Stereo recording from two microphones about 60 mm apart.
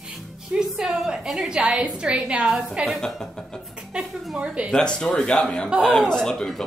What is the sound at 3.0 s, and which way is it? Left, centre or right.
Speech, centre.